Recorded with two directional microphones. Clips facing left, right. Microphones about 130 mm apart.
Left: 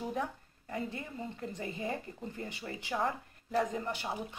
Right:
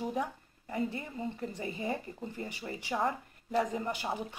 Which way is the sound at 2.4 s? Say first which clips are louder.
Right 1 dB; 15° right (ahead or behind).